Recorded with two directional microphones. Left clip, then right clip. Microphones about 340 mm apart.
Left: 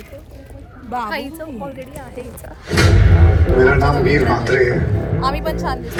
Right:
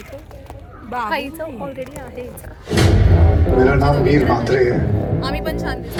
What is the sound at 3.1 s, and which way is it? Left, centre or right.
A man's voice, right.